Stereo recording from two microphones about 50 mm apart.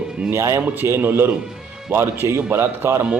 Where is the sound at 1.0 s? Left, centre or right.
Right.